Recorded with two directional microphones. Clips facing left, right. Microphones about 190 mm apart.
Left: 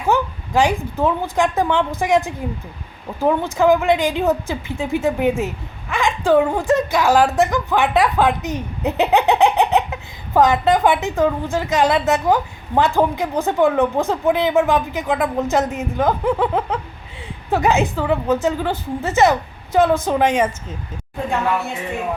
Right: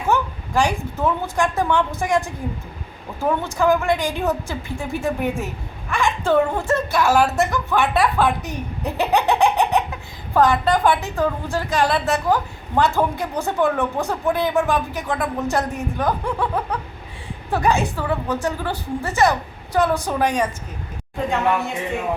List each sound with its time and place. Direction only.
0.1 s a woman's voice: 20° left (ahead or behind)